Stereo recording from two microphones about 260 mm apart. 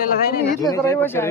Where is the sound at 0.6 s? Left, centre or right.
Centre.